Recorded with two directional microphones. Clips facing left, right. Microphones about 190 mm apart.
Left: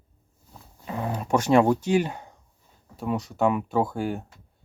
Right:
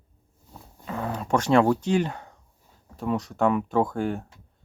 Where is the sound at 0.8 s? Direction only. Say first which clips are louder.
Left 1 dB; 20° left (ahead or behind).